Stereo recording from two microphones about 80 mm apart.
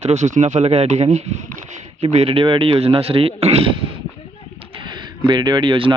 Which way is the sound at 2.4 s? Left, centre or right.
Right.